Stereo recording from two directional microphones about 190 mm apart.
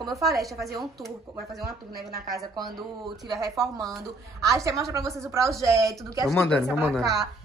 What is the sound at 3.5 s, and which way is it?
Speech, centre (ahead or behind).